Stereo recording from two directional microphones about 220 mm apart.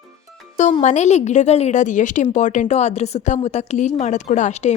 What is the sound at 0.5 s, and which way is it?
A woman's voice, 30° left (ahead or behind).